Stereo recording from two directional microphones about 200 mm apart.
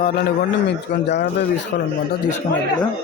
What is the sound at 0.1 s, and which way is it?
A man's voice, 55° left (ahead or behind).